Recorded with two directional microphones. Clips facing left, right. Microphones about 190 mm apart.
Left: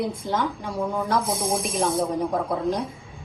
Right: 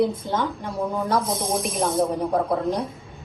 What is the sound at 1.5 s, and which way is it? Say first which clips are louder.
Speech: right 1 dB; 30° left (ahead or behind).